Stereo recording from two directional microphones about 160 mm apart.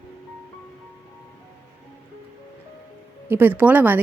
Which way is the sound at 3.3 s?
10° right (ahead or behind).